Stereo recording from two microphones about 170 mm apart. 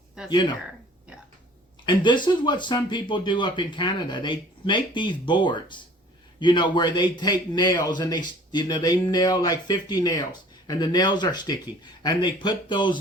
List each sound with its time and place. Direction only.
0.3 s speech: 25° left (ahead or behind)
1.8 s speech: 25° left (ahead or behind)